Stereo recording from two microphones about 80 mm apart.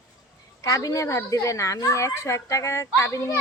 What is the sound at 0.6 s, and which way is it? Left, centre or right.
A child's voice, left.